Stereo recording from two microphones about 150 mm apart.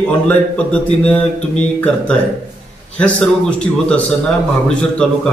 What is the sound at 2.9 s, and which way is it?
Speech, 10° left (ahead or behind).